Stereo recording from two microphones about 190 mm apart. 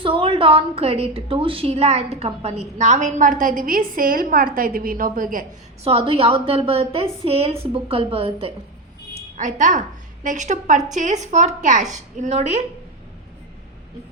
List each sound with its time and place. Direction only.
0.0 s a woman's voice: 30° right (ahead or behind); by 5.5 s 45° right (ahead or behind)
5.8 s a woman's voice: 30° right (ahead or behind)
9.1 s a woman's voice: 40° right (ahead or behind)